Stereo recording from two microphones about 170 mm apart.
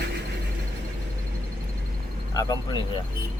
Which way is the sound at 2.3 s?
25° left (ahead or behind).